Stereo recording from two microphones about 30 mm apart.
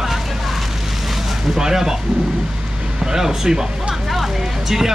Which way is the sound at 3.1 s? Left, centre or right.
Centre.